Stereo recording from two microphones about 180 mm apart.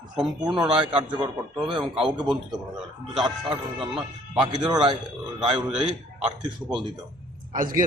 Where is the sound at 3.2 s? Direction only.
30° right (ahead or behind).